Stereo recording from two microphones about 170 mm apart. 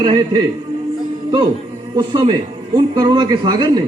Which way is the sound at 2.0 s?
30° right (ahead or behind).